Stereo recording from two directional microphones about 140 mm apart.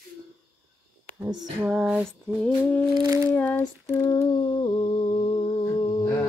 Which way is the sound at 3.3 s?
10° left (ahead or behind).